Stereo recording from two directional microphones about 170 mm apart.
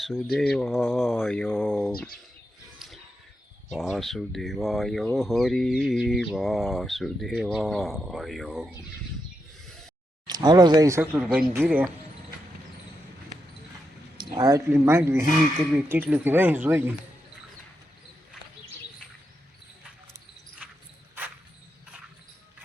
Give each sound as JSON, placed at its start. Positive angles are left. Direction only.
{"t": 0.3, "sound": "speech", "side_deg": 5}
{"t": 2.7, "sound": "a sound", "side_deg": 0}
{"t": 3.7, "sound": "speech", "side_deg": 0}
{"t": 10.2, "sound": "speech", "side_deg": -25}
{"t": 14.2, "sound": "speech", "side_deg": -25}